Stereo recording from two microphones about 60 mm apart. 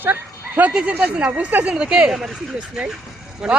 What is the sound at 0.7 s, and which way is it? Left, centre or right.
Speech, centre.